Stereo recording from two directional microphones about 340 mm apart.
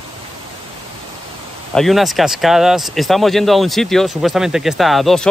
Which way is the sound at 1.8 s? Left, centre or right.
Centre.